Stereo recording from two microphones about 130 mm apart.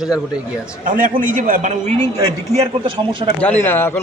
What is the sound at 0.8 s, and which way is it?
A man's voice, 90° right.